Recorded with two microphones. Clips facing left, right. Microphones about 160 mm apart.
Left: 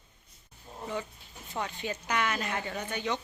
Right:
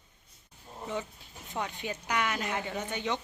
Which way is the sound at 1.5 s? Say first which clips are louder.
Left 1 dB; 15° right (ahead or behind).